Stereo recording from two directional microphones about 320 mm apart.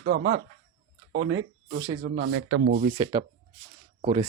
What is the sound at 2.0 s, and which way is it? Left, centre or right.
Speech, right.